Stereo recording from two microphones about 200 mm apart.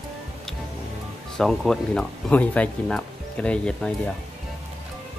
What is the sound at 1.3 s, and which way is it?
Speech, centre (ahead or behind).